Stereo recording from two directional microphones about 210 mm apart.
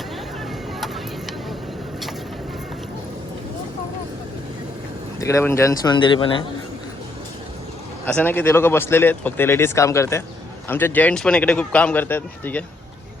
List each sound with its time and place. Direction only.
0.8 s vehicle: centre (ahead or behind)
5.2 s speech: 15° left (ahead or behind)
8.0 s speech: 10° left (ahead or behind)